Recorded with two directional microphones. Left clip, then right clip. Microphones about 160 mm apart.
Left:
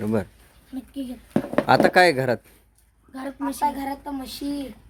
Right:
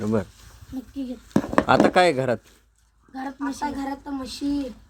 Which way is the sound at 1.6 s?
20° left (ahead or behind).